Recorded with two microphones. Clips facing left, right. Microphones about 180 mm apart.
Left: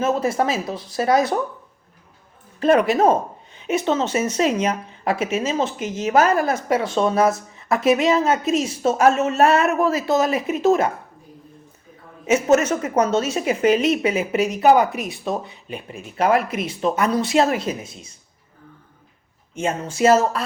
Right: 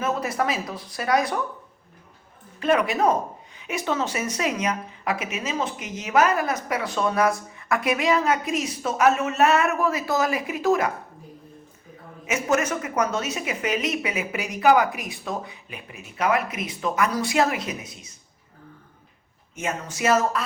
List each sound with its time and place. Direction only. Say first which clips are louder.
0.0 s speech: left 5 dB; 25° left (ahead or behind)
2.6 s speech: left 5 dB; 35° left (ahead or behind)
12.2 s speech: left 7 dB; 25° left (ahead or behind)
19.5 s speech: left 6 dB; 30° left (ahead or behind)